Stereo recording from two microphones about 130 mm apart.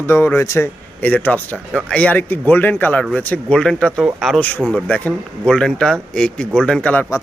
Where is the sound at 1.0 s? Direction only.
10° left (ahead or behind).